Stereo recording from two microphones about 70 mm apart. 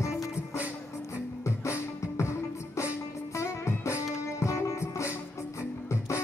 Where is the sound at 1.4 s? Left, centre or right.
Left.